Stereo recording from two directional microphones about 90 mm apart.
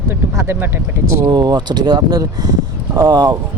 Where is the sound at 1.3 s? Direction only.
55° right (ahead or behind).